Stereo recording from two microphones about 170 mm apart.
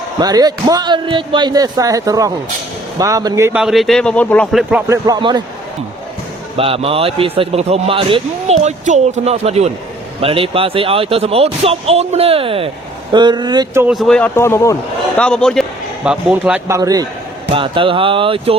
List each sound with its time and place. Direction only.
0.2 s a man's voice: 25° right (ahead or behind)
3.6 s speech: centre (ahead or behind)
4.9 s a man's voice: 20° right (ahead or behind)
6.6 s a man's voice: 35° right (ahead or behind)
13.8 s speech: centre (ahead or behind)
14.3 s a man's voice: 15° left (ahead or behind)
15.2 s speech: 5° left (ahead or behind)
16.0 s a man's voice: 5° right (ahead or behind)
17.5 s a man's voice: 30° right (ahead or behind)